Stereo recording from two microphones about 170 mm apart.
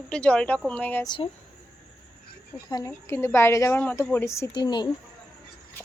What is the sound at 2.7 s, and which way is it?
A woman's voice, 20° left (ahead or behind).